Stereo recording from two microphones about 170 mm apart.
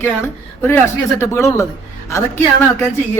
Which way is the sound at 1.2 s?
15° left (ahead or behind).